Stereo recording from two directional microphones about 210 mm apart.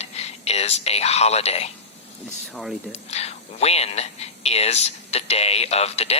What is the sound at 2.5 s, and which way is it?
Speech, centre (ahead or behind).